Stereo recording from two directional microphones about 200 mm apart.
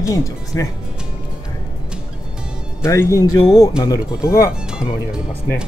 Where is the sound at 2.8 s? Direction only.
15° left (ahead or behind).